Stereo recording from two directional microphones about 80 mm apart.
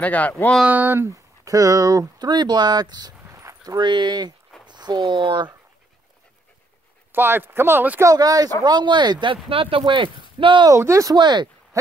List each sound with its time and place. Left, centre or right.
0.0 s speech: centre
0.7 s speech: right
1.1 s speech: right
3.3 s a sound: right
3.8 s speech: right
7.1 s speech: right
8.0 s speech: right
8.6 s speech: right
10.7 s speech: right
11.1 s speech: right
11.7 s owl: right